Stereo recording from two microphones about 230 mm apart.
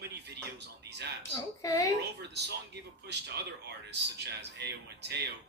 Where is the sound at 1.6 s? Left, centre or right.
Centre.